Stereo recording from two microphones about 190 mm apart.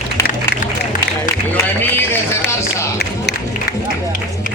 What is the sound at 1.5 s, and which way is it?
Run, 10° left (ahead or behind).